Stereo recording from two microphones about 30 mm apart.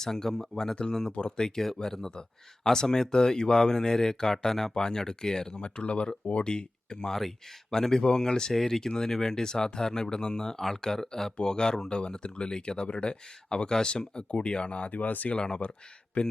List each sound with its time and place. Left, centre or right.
0.0 s speech: centre
1.1 s speech: left
1.5 s speech: centre
4.7 s speech: left
5.6 s speech: left
6.4 s speech: left
7.1 s speech: centre
7.7 s speech: centre
8.5 s speech: centre; by 14.9 s left
14.9 s speech: left
15.4 s speech: left
16.2 s speech: left